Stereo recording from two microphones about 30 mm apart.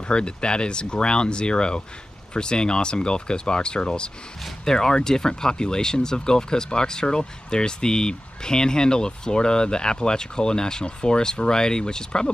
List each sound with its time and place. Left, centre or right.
0.1 s speech: left
4.6 s speech: left